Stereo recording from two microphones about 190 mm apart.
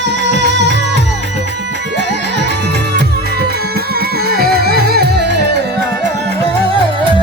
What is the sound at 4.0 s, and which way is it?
Music, 55° right (ahead or behind).